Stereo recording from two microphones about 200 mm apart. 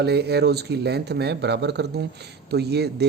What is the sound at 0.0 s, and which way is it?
Speech, 55° right (ahead or behind).